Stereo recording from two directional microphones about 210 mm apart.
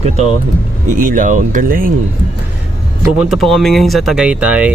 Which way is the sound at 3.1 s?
5° right (ahead or behind).